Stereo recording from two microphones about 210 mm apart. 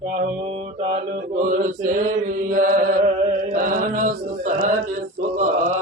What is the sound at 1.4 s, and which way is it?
Mantra, 40° right (ahead or behind).